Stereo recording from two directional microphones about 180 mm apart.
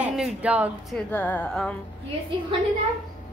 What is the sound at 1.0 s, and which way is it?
Speech, 10° left (ahead or behind).